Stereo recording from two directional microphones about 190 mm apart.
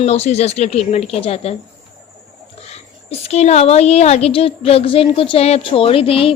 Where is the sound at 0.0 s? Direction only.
35° left (ahead or behind).